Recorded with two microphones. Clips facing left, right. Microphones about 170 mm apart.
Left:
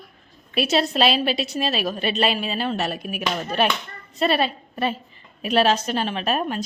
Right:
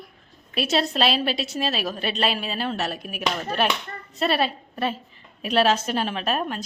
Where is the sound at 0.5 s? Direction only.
Centre (ahead or behind).